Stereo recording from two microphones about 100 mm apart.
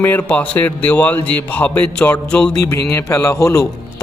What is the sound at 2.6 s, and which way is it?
A man's voice, 30° left (ahead or behind).